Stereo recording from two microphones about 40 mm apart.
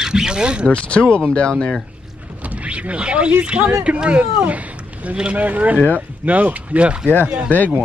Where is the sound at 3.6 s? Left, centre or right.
Right.